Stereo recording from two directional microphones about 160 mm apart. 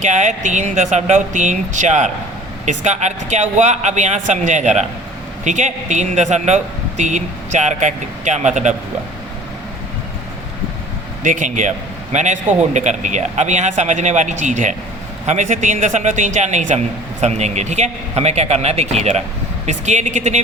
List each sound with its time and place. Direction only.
0.0 s a man's voice: 50° right (ahead or behind)
11.2 s a man's voice: 50° right (ahead or behind)